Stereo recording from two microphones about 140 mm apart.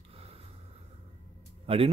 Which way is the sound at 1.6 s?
45° right (ahead or behind).